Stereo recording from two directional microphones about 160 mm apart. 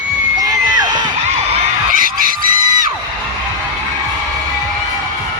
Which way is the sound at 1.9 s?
60° right (ahead or behind).